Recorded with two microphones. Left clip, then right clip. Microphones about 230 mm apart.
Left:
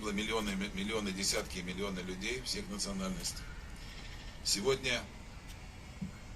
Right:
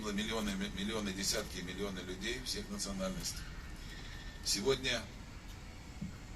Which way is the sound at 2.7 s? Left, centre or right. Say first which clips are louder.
Left 1 dB; left.